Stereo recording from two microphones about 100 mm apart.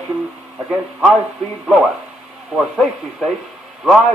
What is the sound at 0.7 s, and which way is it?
Speech, 10° right (ahead or behind).